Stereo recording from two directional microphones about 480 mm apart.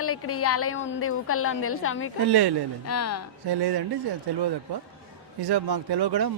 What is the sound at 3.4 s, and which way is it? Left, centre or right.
Speech, right.